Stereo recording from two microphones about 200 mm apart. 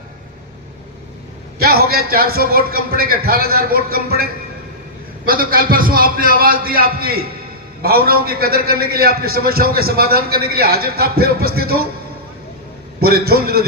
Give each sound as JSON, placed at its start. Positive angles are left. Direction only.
{"t": 1.5, "sound": "a man's voice", "side_deg": -50}
{"t": 13.0, "sound": "a man's voice", "side_deg": -50}